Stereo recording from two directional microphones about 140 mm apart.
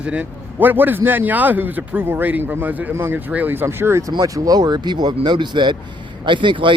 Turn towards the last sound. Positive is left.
turn(degrees=-35)  # may be behind; listen again after turning